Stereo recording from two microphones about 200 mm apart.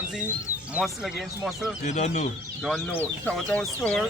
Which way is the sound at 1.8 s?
35° left (ahead or behind).